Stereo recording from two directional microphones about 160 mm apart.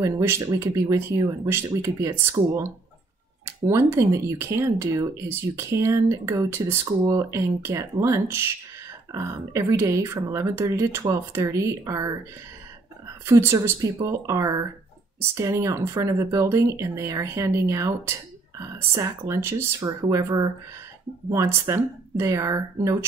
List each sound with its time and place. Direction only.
0.0 s speech: 15° right (ahead or behind)
13.2 s speech: 15° right (ahead or behind)